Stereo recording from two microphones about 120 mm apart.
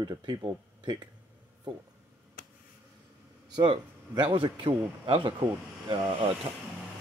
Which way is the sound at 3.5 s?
40° right (ahead or behind).